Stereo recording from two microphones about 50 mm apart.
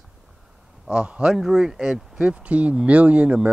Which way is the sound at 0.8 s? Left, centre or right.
Centre.